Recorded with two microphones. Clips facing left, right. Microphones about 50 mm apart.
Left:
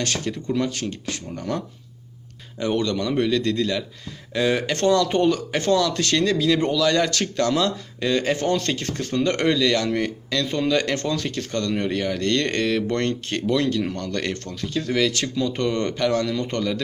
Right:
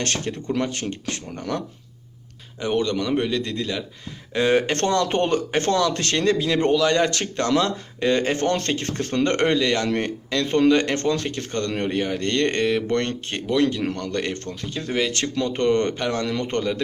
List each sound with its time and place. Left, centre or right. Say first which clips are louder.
0.0 s speech: even; right
2.6 s speech: even; centre
4.4 s speech: right 2 dB; right
16.3 s speech: even; right